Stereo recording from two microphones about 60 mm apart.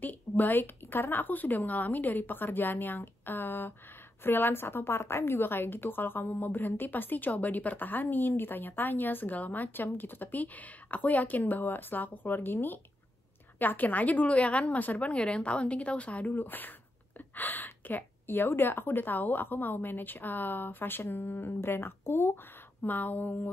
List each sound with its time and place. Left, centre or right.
0.0 s a woman's voice: left
22.8 s a woman's voice: left